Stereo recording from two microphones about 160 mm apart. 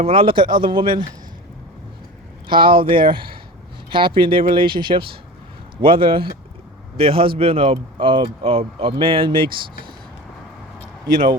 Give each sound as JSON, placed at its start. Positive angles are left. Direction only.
{"t": 0.0, "sound": "speech", "side_deg": -35}
{"t": 2.5, "sound": "speech", "side_deg": -30}